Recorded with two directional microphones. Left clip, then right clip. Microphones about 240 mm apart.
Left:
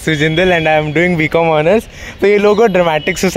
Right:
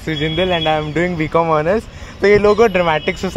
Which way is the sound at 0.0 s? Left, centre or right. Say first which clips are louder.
Left 6 dB; left.